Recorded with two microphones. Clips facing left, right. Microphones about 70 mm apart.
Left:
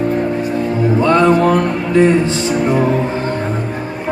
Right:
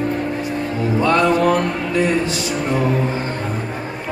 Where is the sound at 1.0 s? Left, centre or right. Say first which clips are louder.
Left 4 dB; left.